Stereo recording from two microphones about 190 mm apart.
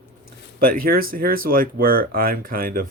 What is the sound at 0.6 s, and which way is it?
Speech, 50° right (ahead or behind).